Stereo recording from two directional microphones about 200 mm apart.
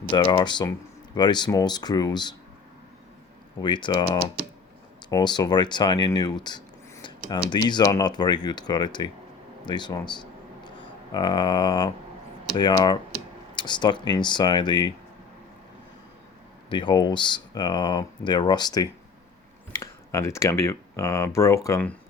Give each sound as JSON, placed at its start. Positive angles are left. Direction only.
{"t": 0.1, "sound": "speech", "side_deg": 20}
{"t": 3.6, "sound": "speech", "side_deg": 25}
{"t": 9.6, "sound": "a sound", "side_deg": 20}
{"t": 11.1, "sound": "speech", "side_deg": 20}
{"t": 16.6, "sound": "speech", "side_deg": 25}